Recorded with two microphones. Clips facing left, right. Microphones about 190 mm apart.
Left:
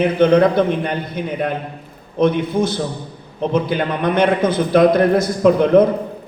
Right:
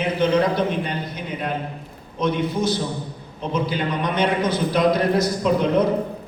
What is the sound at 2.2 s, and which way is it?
A man's voice, 55° left (ahead or behind).